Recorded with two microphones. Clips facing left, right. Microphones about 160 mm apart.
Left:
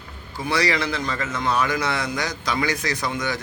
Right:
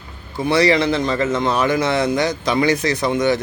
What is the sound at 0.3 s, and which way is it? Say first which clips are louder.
A man's voice: right 7 dB; 25° right (ahead or behind).